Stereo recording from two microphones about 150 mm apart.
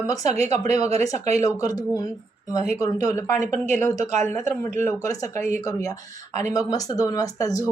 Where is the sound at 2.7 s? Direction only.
20° left (ahead or behind).